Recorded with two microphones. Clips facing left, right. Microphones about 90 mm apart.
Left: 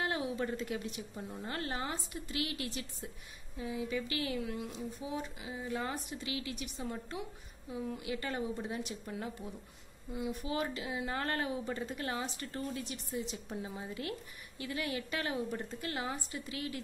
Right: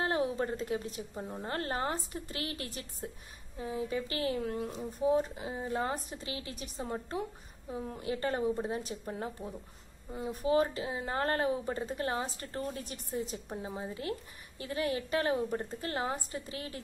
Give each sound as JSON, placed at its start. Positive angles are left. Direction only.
{"t": 0.0, "sound": "speech", "side_deg": -35}